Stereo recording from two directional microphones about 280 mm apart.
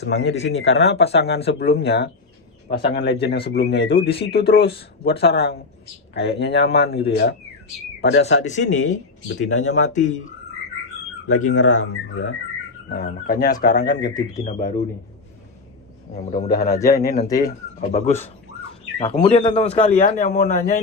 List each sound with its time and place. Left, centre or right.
0.0 s a man's voice: left
11.3 s speech: left
12.9 s a man's voice: left
14.0 s speech: centre
16.3 s a man's voice: left
16.6 s speech: centre
17.4 s a man's voice: left